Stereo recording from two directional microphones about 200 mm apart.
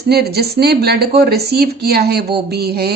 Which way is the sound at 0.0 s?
55° right (ahead or behind).